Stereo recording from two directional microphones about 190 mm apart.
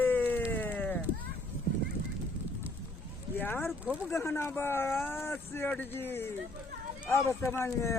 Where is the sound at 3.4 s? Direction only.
10° left (ahead or behind).